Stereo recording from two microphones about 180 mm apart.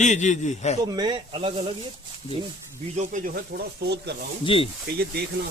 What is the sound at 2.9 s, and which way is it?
Speech, 45° right (ahead or behind).